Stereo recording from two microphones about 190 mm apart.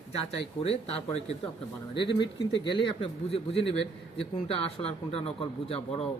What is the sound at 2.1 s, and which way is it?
Speech, 25° left (ahead or behind).